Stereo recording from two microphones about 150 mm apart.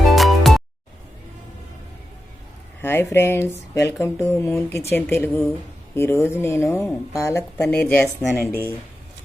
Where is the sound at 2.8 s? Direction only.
15° left (ahead or behind).